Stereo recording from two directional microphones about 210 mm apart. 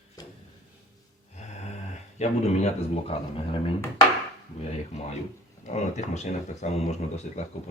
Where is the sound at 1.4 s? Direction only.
30° left (ahead or behind).